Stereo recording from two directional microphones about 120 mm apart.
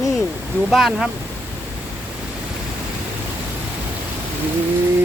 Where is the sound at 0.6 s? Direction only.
Centre (ahead or behind).